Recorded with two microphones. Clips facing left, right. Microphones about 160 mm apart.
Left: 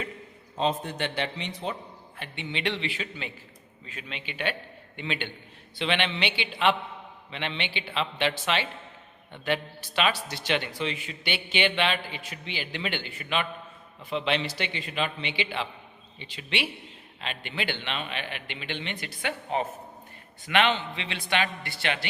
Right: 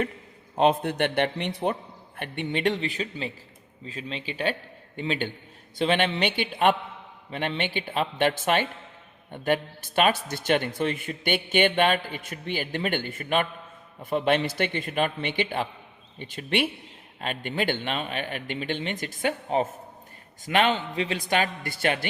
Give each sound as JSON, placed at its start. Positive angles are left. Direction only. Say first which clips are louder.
{"t": 0.5, "sound": "a man's voice", "louder": "right 6 dB", "side_deg": -60}